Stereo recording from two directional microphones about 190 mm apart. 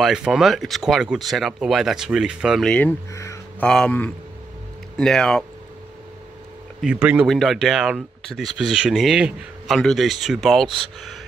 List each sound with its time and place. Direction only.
0.0 s speech: 5° right (ahead or behind)
3.1 s a sound: 15° left (ahead or behind)
3.6 s speech: 5° left (ahead or behind)
6.8 s speech: 5° right (ahead or behind)